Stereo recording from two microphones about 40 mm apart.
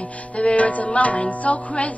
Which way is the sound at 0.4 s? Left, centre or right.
Left.